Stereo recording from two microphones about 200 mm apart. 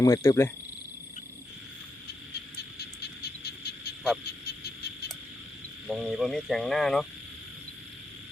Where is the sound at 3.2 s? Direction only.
55° left (ahead or behind).